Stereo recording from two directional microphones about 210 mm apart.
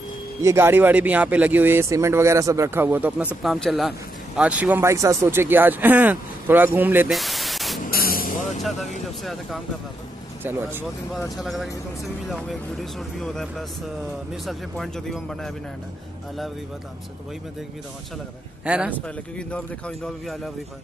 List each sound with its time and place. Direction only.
0.4 s speech: 15° right (ahead or behind)
7.8 s vehicle: 45° left (ahead or behind)
9.2 s speech: centre (ahead or behind)
13.2 s speech: centre (ahead or behind)
18.7 s speech: 5° right (ahead or behind)
18.9 s speech: 5° left (ahead or behind)